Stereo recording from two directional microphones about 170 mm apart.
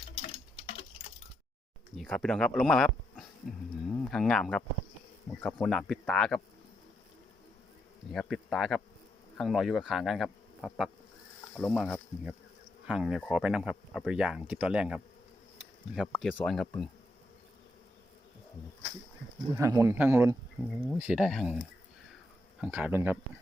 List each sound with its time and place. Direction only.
0.2 s tick-tock: 35° left (ahead or behind)
2.0 s speech: 5° left (ahead or behind)
8.1 s speech: 5° left (ahead or behind)
19.5 s speech: 20° right (ahead or behind); by 21.6 s 5° right (ahead or behind)
22.6 s speech: 10° right (ahead or behind)